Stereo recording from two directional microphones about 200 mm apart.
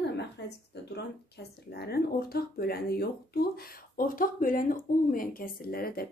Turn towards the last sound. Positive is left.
turn(degrees=45)  # may be behind; listen again after turning